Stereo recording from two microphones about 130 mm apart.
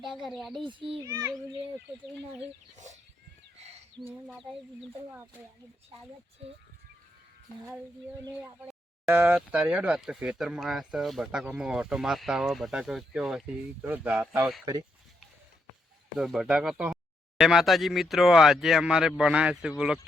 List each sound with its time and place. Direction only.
0.0 s speech: centre (ahead or behind)
0.6 s a child's voice: 40° right (ahead or behind)
1.0 s speech: 20° right (ahead or behind)
2.7 s speech: 65° right (ahead or behind)
3.6 s a sound: 55° right (ahead or behind)
8.4 s speech: 20° right (ahead or behind)
14.6 s speech: 30° right (ahead or behind)
16.1 s speech: 5° right (ahead or behind)